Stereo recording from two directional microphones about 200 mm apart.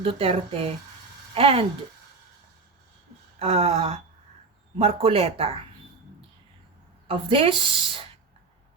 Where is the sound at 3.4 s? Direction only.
30° right (ahead or behind).